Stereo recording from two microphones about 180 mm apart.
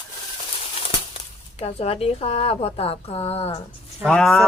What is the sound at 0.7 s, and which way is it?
Speech, 30° left (ahead or behind).